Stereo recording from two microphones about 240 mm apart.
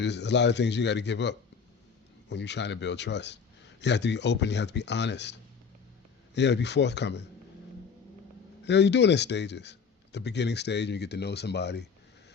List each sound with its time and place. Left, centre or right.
0.0 s speech: left
8.6 s speech: left